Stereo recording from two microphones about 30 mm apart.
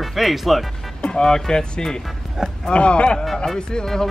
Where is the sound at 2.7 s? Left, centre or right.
Left.